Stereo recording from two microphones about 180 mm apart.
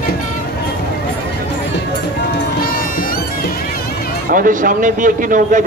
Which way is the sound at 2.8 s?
50° left (ahead or behind).